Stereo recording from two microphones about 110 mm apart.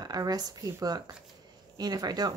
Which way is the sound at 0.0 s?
35° right (ahead or behind).